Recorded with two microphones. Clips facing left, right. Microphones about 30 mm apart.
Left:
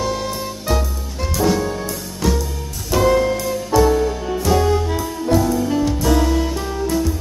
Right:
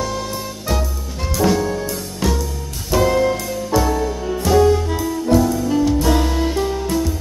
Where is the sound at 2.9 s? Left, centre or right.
Centre.